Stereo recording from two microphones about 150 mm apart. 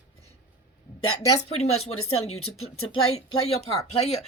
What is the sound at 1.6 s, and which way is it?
Speech, 45° left (ahead or behind).